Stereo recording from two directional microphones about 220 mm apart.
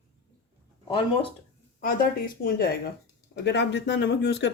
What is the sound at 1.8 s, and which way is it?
Speech, 40° left (ahead or behind).